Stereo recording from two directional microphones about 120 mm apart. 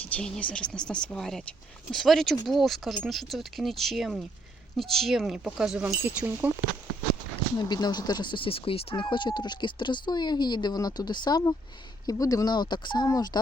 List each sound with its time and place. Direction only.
0.0 s speech: 10° left (ahead or behind); by 5.8 s 5° right (ahead or behind)
5.8 s speech: 15° right (ahead or behind)
7.7 s speech: 35° left (ahead or behind)